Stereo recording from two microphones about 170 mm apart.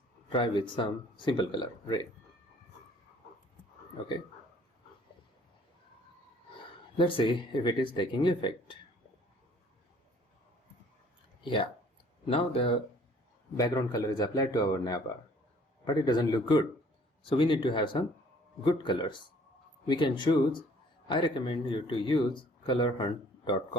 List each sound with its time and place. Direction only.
0.3 s speech: 30° left (ahead or behind)
6.9 s speech: 30° left (ahead or behind)
11.4 s speech: 30° left (ahead or behind)
13.6 s speech: 20° left (ahead or behind)